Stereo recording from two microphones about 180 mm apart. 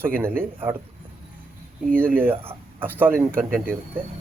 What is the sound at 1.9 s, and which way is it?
Speech, 10° right (ahead or behind).